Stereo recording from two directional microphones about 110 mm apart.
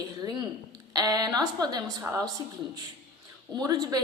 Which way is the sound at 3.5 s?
40° right (ahead or behind).